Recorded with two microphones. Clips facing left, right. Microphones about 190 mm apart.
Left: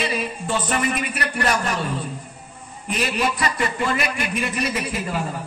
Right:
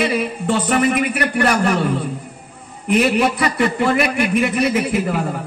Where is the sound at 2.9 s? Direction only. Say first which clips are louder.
Right 8 dB; 60° right (ahead or behind).